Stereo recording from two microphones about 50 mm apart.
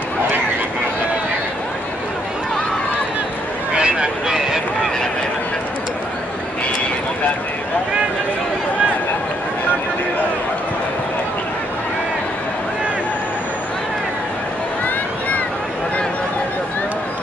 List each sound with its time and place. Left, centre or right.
3.7 s vehicle: centre